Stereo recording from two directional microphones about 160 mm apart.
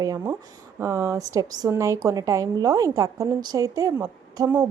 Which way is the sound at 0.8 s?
20° right (ahead or behind).